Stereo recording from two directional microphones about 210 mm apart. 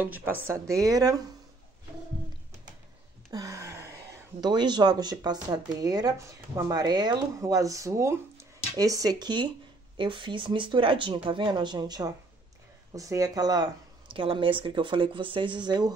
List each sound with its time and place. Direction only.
0.0 s speech: 10° right (ahead or behind)
3.3 s a sound: 15° right (ahead or behind)
4.4 s speech: 20° right (ahead or behind)